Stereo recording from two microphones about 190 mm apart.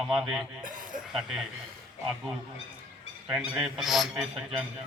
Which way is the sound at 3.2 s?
5° right (ahead or behind).